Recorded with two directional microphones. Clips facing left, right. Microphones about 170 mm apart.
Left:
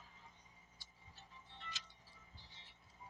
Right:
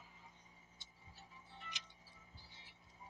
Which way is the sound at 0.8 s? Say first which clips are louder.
Right 1 dB; 20° right (ahead or behind).